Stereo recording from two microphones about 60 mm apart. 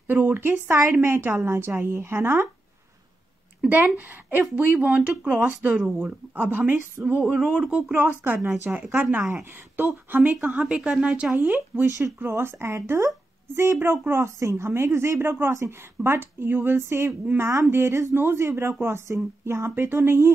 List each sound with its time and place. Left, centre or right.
0.0 s speech: right
1.3 s speech: right
3.6 s speech: right
8.5 s speech: right
8.9 s speech: right
9.2 s speech: right
10.3 s speech: right
11.3 s speech: right
14.2 s a woman's voice: right
14.7 s speech: right
17.4 s a woman's voice: right
17.6 s speech: right